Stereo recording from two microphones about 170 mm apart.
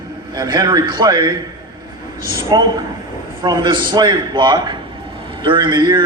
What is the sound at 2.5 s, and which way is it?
A man's voice, 20° right (ahead or behind).